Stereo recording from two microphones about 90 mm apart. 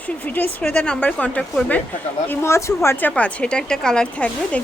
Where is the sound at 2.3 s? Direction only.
30° left (ahead or behind).